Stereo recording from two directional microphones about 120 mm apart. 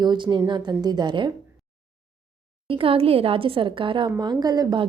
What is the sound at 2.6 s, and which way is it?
A woman's voice, 50° right (ahead or behind).